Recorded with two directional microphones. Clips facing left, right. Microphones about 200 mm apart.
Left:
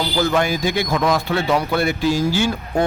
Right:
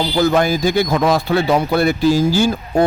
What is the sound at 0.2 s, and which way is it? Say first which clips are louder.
Speech: right 4 dB; 35° right (ahead or behind).